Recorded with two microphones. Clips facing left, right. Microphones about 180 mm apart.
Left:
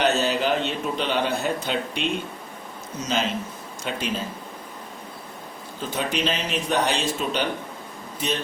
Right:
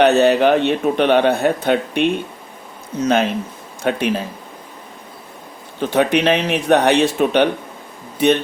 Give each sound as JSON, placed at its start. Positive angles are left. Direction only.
{"t": 0.0, "sound": "a man's voice", "side_deg": -65}
{"t": 5.8, "sound": "a man's voice", "side_deg": -65}